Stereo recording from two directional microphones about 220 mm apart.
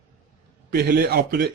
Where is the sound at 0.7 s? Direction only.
45° right (ahead or behind).